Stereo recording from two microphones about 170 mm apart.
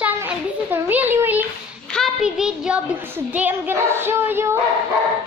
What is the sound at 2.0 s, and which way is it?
Child singing, 5° right (ahead or behind).